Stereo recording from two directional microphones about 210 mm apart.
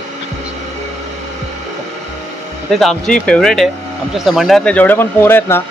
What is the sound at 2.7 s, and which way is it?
Speech, centre (ahead or behind).